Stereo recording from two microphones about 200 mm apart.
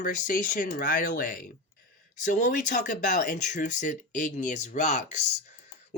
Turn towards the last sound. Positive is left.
turn(degrees=35)  # may be behind; listen again after turning